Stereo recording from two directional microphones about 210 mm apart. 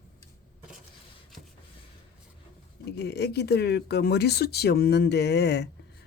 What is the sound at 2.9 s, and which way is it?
Speech, 50° left (ahead or behind).